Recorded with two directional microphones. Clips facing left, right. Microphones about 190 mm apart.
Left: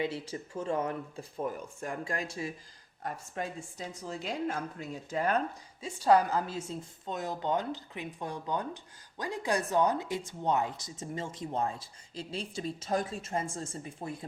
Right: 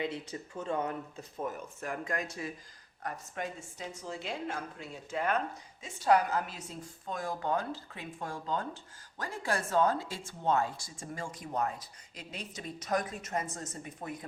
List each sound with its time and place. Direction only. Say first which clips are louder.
0.0 s a woman's voice: left 2 dB; 30° left (ahead or behind)